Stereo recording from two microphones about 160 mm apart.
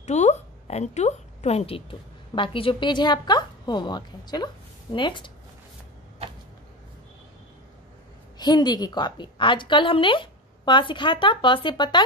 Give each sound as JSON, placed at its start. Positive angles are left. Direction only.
{"t": 0.0, "sound": "a woman's voice", "side_deg": 45}
{"t": 8.4, "sound": "a woman's voice", "side_deg": 25}